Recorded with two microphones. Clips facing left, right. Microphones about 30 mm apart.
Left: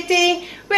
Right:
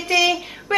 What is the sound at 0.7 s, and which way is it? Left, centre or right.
Speech, centre.